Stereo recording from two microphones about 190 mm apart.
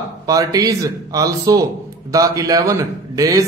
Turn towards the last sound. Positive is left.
turn(degrees=-20)  # may be behind; listen again after turning